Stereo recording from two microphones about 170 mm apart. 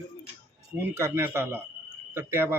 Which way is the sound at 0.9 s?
15° right (ahead or behind).